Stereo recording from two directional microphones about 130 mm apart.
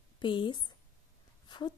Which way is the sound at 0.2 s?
35° left (ahead or behind).